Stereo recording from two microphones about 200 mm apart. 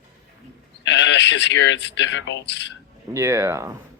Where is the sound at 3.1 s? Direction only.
15° right (ahead or behind).